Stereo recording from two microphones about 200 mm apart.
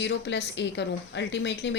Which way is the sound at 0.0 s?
60° left (ahead or behind).